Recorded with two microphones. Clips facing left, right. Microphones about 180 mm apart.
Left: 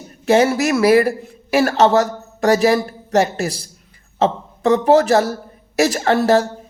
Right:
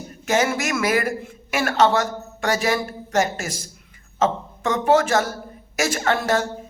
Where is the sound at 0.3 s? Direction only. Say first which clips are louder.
Left 7 dB; 35° left (ahead or behind).